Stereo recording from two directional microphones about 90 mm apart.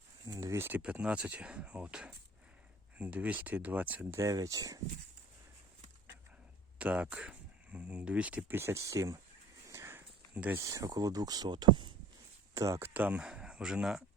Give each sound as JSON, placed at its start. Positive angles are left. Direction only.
{"t": 0.3, "sound": "speech", "side_deg": -30}
{"t": 0.8, "sound": "speech", "side_deg": -10}
{"t": 4.2, "sound": "speech", "side_deg": -40}
{"t": 6.7, "sound": "speech", "side_deg": -15}
{"t": 9.6, "sound": "a sound", "side_deg": -30}
{"t": 10.3, "sound": "speech", "side_deg": -15}
{"t": 10.6, "sound": "speech", "side_deg": -35}
{"t": 12.5, "sound": "speech", "side_deg": -35}
{"t": 12.8, "sound": "speech", "side_deg": -20}